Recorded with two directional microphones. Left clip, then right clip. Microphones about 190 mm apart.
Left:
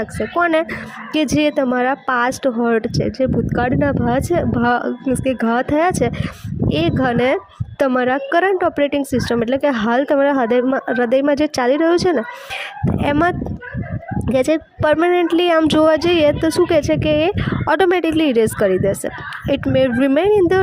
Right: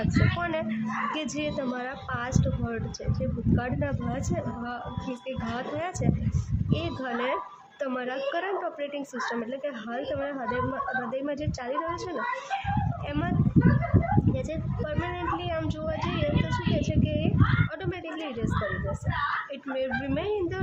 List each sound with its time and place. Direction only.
0.3 s a woman's voice: 45° left (ahead or behind)
14.3 s a woman's voice: 50° left (ahead or behind)
19.5 s a woman's voice: 45° left (ahead or behind)